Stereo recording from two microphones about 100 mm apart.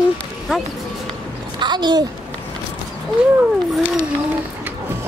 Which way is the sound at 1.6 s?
45° right (ahead or behind).